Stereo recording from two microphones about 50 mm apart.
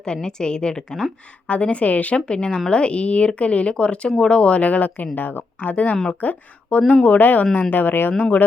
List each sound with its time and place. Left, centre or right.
0.0 s a woman's voice: centre
1.5 s speech: left
2.2 s speech: centre
7.2 s speech: left
8.1 s speech: left